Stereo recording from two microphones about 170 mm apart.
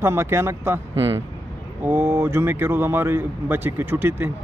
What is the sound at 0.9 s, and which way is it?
Speech, 25° right (ahead or behind).